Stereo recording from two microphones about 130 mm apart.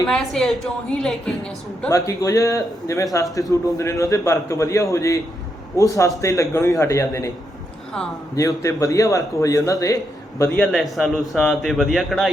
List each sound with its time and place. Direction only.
0.1 s a man's voice: centre (ahead or behind)
1.9 s a man's voice: 25° left (ahead or behind)
8.4 s a man's voice: 25° left (ahead or behind)
10.6 s a man's voice: centre (ahead or behind)